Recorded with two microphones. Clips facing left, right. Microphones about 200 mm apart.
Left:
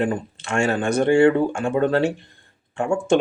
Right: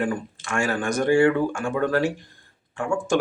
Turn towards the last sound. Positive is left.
turn(degrees=25)  # may be behind; listen again after turning